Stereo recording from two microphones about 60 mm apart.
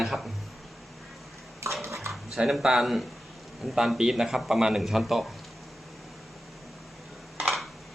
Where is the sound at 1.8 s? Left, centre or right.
Right.